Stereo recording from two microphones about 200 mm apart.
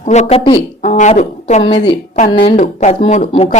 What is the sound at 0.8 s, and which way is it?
A woman's voice, 40° left (ahead or behind).